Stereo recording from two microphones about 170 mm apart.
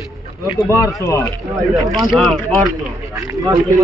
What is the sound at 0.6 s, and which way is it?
Speech, 20° left (ahead or behind).